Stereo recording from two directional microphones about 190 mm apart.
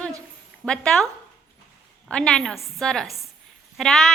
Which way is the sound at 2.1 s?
5° left (ahead or behind).